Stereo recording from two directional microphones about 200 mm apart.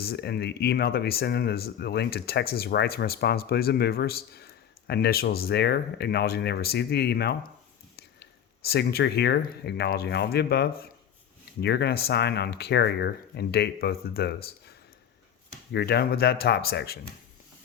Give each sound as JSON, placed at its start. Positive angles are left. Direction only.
{"t": 0.0, "sound": "speech", "side_deg": 55}
{"t": 15.7, "sound": "speech", "side_deg": 55}